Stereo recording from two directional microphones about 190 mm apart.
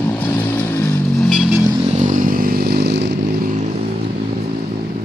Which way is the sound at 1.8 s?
35° right (ahead or behind).